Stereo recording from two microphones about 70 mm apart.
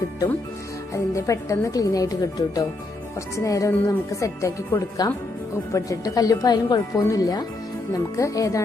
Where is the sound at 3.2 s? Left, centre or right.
Left.